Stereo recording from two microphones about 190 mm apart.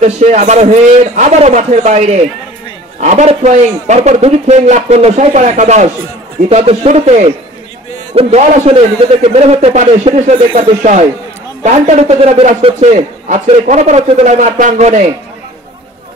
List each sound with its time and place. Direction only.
0.0 s a man's voice: 40° right (ahead or behind)